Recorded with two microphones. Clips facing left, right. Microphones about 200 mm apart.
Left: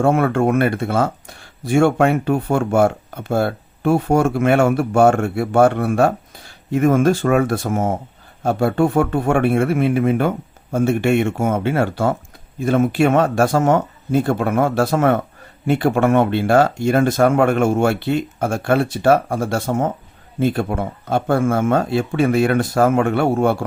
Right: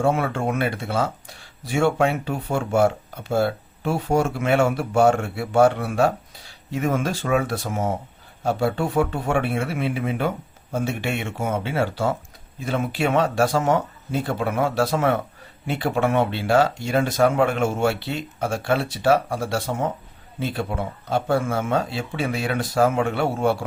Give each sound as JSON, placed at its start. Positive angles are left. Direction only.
{"t": 0.0, "sound": "speech", "side_deg": 55}